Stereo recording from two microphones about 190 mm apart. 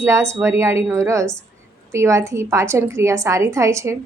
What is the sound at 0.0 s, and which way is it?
A woman's voice, 15° right (ahead or behind).